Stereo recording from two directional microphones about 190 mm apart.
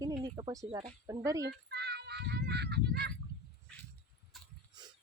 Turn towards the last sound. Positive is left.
turn(degrees=0)  # may be behind; listen again after turning